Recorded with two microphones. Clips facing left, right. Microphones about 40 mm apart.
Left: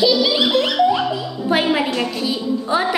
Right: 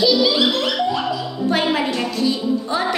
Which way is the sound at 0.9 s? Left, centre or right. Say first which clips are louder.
Left 3 dB; left.